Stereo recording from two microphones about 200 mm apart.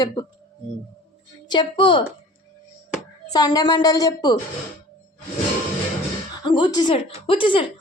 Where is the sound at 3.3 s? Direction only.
20° left (ahead or behind).